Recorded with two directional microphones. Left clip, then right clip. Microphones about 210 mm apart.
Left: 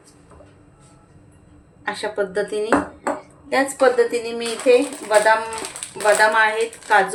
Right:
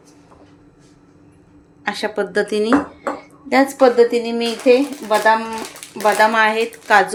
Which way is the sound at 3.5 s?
35° right (ahead or behind).